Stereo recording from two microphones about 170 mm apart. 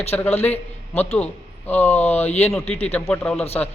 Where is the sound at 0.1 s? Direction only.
10° left (ahead or behind).